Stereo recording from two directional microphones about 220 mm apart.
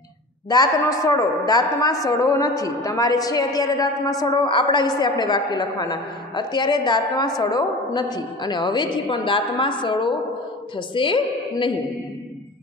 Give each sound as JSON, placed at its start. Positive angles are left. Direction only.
{"t": 0.5, "sound": "a man's voice", "side_deg": 15}